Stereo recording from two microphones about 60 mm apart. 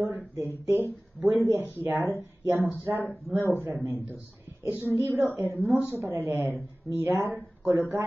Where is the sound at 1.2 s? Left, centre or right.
Right.